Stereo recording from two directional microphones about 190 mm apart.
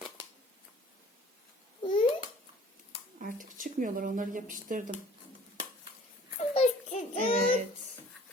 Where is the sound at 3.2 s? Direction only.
45° right (ahead or behind).